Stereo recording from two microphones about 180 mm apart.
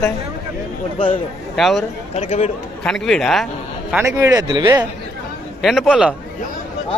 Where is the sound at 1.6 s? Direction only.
Centre (ahead or behind).